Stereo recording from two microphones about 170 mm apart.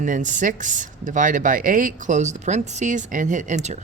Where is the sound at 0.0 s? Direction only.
50° right (ahead or behind).